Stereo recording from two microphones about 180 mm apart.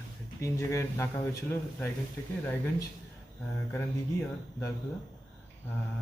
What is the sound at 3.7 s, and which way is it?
Speech, 15° left (ahead or behind).